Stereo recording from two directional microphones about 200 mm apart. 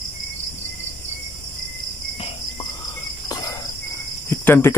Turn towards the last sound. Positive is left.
turn(degrees=10)  # may be behind; listen again after turning